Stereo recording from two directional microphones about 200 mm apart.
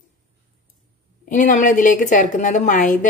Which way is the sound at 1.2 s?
40° left (ahead or behind).